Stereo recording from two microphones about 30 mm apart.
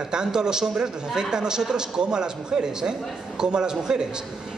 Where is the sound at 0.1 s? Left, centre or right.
Right.